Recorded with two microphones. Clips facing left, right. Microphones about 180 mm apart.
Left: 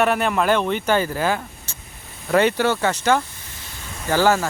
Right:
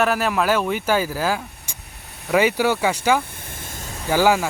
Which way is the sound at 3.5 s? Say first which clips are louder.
Right 5 dB; 50° right (ahead or behind).